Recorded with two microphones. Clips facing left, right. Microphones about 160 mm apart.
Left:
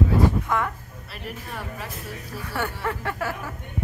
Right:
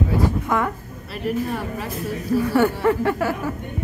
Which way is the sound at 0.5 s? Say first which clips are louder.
Right 4 dB; 5° right (ahead or behind).